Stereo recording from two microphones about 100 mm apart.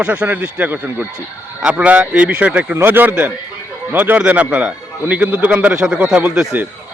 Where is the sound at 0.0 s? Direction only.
10° right (ahead or behind).